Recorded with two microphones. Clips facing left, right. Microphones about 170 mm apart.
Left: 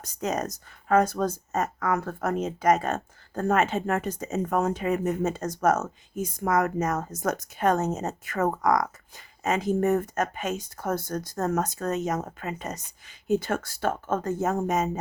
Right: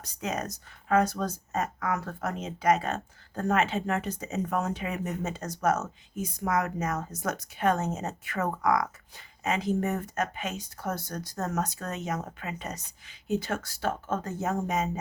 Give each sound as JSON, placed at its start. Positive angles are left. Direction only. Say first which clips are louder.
{"t": 0.0, "sound": "speech", "louder": "left 4 dB", "side_deg": 45}